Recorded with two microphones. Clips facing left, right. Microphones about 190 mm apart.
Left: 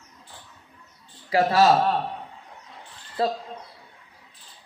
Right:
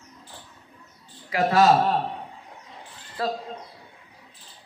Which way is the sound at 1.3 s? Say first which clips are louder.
Left 3 dB; 30° left (ahead or behind).